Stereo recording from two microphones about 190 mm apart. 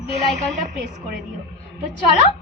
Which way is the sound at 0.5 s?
40° right (ahead or behind).